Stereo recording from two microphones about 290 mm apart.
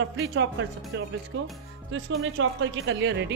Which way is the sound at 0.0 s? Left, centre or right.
Right.